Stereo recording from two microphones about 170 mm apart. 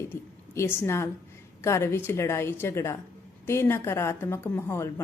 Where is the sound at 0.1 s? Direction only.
15° left (ahead or behind).